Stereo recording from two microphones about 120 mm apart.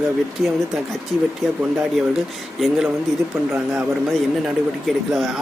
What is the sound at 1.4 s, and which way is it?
Speech, centre (ahead or behind).